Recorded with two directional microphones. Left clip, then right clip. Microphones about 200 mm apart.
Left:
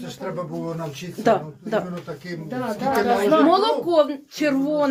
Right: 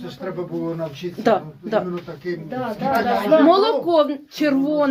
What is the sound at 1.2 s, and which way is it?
Speech, 15° right (ahead or behind).